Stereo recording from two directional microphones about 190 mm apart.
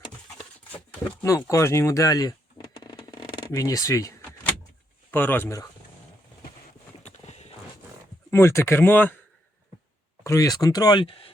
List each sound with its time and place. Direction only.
1.2 s speech: 15° left (ahead or behind)
2.7 s a sound: 20° left (ahead or behind)
5.1 s speech: 10° left (ahead or behind)
7.0 s clip-clop: 35° left (ahead or behind)
8.3 s speech: 15° left (ahead or behind)
10.2 s speech: 15° left (ahead or behind)